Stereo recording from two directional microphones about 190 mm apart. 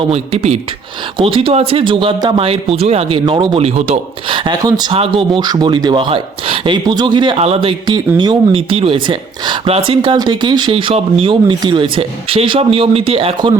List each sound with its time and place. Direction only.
0.0 s speech: 35° right (ahead or behind)